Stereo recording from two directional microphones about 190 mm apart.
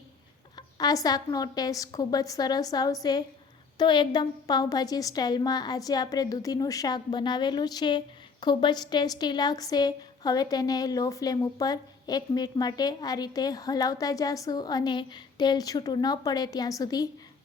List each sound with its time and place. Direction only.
0.5 s a woman's voice: 20° left (ahead or behind)